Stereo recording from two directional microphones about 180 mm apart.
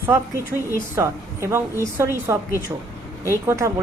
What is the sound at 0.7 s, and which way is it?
Speech, 15° right (ahead or behind).